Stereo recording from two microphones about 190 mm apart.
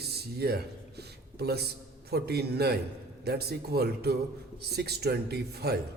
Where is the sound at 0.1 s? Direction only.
55° right (ahead or behind).